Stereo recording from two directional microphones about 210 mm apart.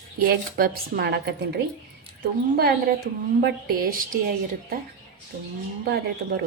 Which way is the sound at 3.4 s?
45° right (ahead or behind).